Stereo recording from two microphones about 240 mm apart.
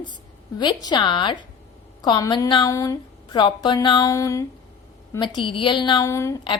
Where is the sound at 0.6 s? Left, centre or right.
Centre.